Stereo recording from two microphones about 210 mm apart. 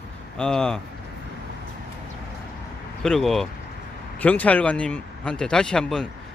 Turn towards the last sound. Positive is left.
turn(degrees=5)  # may be behind; listen again after turning